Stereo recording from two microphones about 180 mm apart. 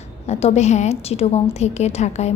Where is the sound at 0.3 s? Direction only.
35° left (ahead or behind).